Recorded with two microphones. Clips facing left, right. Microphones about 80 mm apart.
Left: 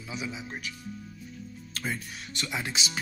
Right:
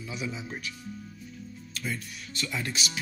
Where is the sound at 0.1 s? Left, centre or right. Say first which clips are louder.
Even; centre.